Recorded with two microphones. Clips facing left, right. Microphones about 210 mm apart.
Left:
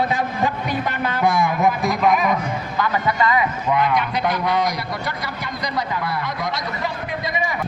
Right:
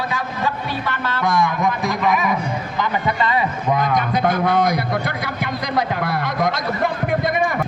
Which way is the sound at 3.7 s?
45° right (ahead or behind).